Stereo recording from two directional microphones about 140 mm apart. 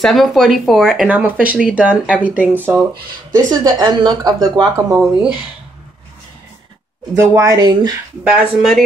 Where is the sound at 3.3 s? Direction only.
25° right (ahead or behind).